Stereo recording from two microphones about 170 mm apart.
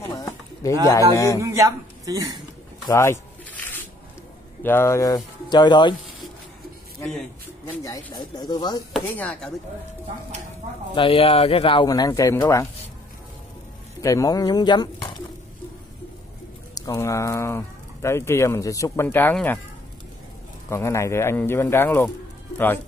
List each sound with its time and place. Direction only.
0.6 s speech: 20° left (ahead or behind)
1.4 s a woman's voice: 15° right (ahead or behind)
2.9 s a sound: 15° left (ahead or behind)
4.6 s speech: 15° left (ahead or behind)
7.0 s speech: centre (ahead or behind)
7.8 s speech: 20° left (ahead or behind)
8.9 s speech: 5° left (ahead or behind)
11.0 s speech: 35° left (ahead or behind)
14.0 s speech: 20° left (ahead or behind)
16.7 s speech: 20° left (ahead or behind)
20.7 s speech: 15° left (ahead or behind)